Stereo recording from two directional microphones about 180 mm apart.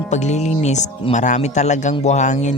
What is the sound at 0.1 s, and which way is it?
Speech, 40° left (ahead or behind).